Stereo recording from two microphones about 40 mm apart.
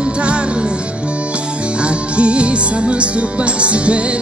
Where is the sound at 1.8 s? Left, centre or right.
Right.